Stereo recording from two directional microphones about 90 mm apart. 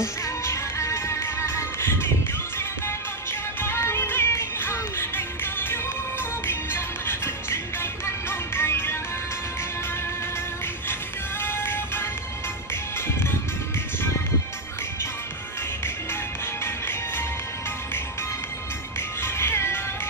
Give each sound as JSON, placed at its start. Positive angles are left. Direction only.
{"t": 0.0, "sound": "music", "side_deg": 30}
{"t": 3.3, "sound": "music", "side_deg": 30}
{"t": 11.4, "sound": "music", "side_deg": 25}
{"t": 16.6, "sound": "music", "side_deg": 25}
{"t": 18.9, "sound": "music", "side_deg": 30}